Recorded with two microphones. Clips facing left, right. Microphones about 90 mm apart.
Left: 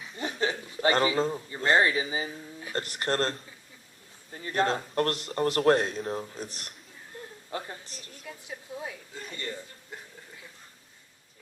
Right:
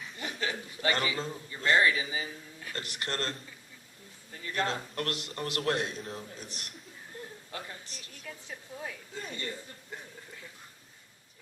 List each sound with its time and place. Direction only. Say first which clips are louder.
0.2 s a man's voice: left 6 dB; 30° left (ahead or behind)
8.2 s a woman's voice: left 2 dB; 15° left (ahead or behind)